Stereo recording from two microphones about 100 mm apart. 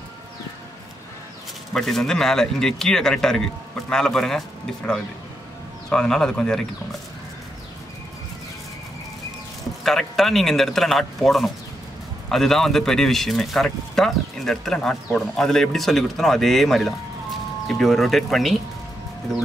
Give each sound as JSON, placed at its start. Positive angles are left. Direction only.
{"t": 1.7, "sound": "a man's voice", "side_deg": 5}
{"t": 9.8, "sound": "speech", "side_deg": 5}